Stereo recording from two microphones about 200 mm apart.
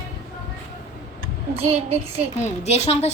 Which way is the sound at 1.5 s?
30° right (ahead or behind).